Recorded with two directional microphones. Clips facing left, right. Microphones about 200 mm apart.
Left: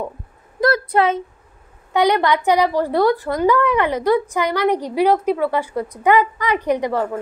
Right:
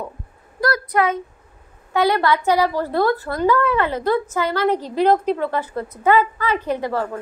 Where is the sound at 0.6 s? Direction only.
25° left (ahead or behind).